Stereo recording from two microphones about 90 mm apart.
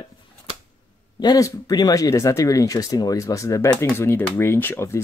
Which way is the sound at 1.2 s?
45° left (ahead or behind).